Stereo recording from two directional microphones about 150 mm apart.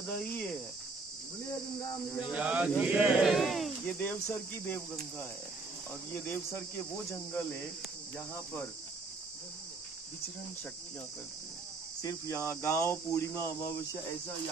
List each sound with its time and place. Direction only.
0.1 s speech: 10° left (ahead or behind)
1.8 s cricket: 25° left (ahead or behind)
2.3 s speech: 10° right (ahead or behind)
4.0 s speech: 15° left (ahead or behind)
6.1 s speech: 15° left (ahead or behind)
12.0 s cricket: 20° left (ahead or behind)